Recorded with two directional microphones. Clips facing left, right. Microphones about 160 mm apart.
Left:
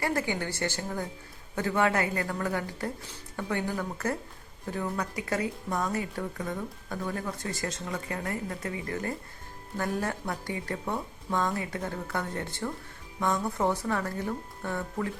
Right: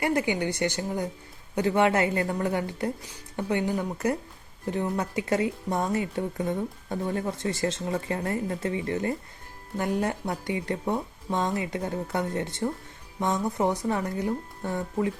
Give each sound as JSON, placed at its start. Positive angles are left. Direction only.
{"t": 0.0, "sound": "speech", "side_deg": -20}